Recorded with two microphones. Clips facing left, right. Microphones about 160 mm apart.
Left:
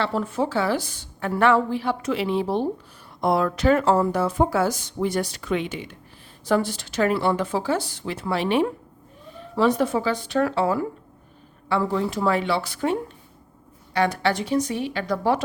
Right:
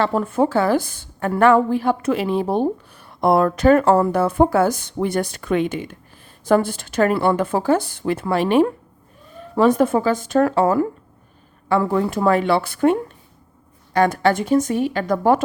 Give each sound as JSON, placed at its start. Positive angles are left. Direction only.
{"t": 0.0, "sound": "speech", "side_deg": -50}